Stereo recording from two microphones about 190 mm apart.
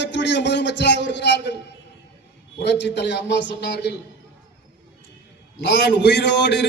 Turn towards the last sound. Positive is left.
turn(degrees=65)  # may be behind; listen again after turning